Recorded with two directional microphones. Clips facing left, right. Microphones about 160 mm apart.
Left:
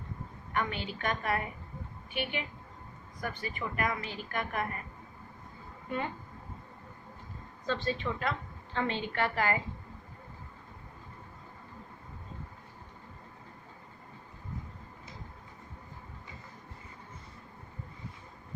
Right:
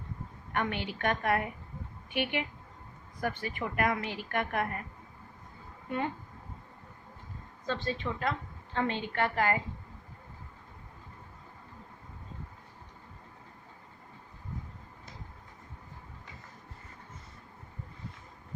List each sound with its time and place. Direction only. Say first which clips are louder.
0.5 s a woman's voice: right 1 dB; 65° right (ahead or behind)
7.7 s a woman's voice: left 1 dB; 45° right (ahead or behind)